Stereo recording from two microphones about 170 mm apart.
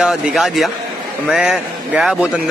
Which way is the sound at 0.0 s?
Centre (ahead or behind).